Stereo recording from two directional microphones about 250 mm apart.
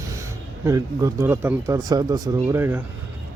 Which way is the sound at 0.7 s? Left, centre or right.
Centre.